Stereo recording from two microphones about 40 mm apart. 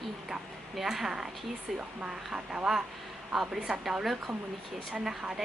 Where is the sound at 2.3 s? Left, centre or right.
Right.